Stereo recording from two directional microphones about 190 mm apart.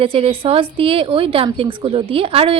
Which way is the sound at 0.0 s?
30° right (ahead or behind).